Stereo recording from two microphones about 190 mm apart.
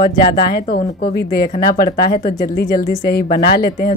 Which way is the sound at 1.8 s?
35° left (ahead or behind).